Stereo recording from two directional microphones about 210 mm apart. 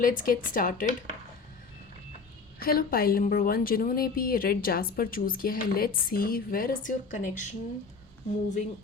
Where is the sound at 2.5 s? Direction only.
45° left (ahead or behind).